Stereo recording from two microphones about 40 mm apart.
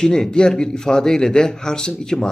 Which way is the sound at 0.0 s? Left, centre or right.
Centre.